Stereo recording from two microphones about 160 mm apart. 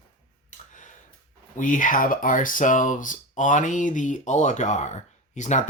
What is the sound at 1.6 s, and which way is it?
Speech, 55° left (ahead or behind).